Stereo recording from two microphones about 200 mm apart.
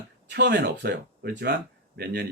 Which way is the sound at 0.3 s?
55° right (ahead or behind).